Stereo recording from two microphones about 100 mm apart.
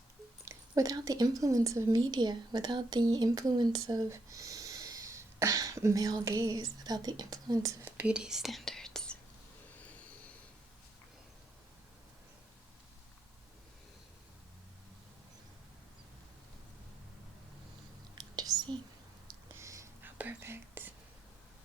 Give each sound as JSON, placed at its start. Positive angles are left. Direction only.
{"t": 0.7, "sound": "a woman's voice", "side_deg": -40}
{"t": 2.0, "sound": "speech", "side_deg": -45}
{"t": 4.1, "sound": "speech", "side_deg": -30}
{"t": 7.8, "sound": "speech", "side_deg": -15}
{"t": 18.1, "sound": "whispering", "side_deg": -45}
{"t": 19.5, "sound": "whispering", "side_deg": -30}